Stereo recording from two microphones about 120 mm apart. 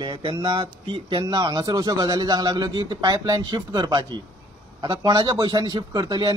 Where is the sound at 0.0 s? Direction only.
40° right (ahead or behind).